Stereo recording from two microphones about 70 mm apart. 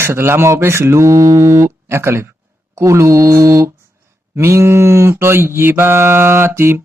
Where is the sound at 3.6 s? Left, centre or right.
Right.